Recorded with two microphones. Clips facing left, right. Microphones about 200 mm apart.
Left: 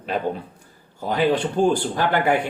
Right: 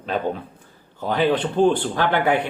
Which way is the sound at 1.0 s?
10° left (ahead or behind).